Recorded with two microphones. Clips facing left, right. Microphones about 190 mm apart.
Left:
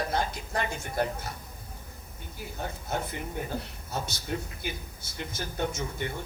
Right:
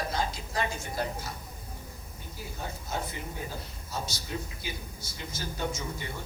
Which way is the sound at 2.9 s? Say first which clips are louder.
Left 3 dB; 60° left (ahead or behind).